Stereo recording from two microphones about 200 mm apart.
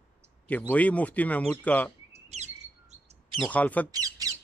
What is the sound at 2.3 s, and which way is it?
Chirp, 35° right (ahead or behind).